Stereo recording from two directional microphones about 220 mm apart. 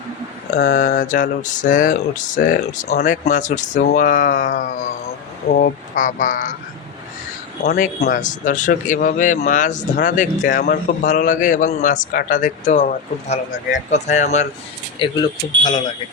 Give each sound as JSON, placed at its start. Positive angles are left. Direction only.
{"t": 0.5, "sound": "speech", "side_deg": 45}
{"t": 7.6, "sound": "speech", "side_deg": 45}
{"t": 14.9, "sound": "speech", "side_deg": 20}